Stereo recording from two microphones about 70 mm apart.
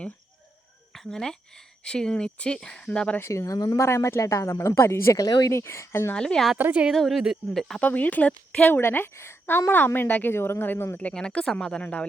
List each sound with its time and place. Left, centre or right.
0.9 s speech: centre
3.2 s speech: left
3.8 s speech: left
4.2 s speech: left
5.2 s speech: left
5.5 s a woman's voice: left
6.1 s speech: centre
6.6 s a woman's voice: right
6.9 s a woman's voice: centre
7.8 s a woman's voice: left
11.1 s speech: centre